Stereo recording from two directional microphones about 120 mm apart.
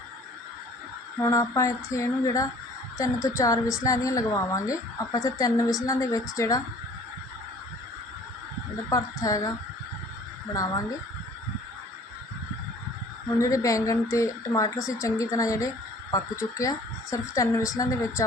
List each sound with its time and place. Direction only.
1.2 s a woman's voice: 25° left (ahead or behind)
8.9 s a woman's voice: 30° left (ahead or behind)
13.4 s a woman's voice: 25° left (ahead or behind)